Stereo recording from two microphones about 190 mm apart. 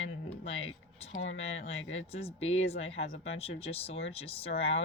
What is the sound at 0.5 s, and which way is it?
Speech, 30° left (ahead or behind).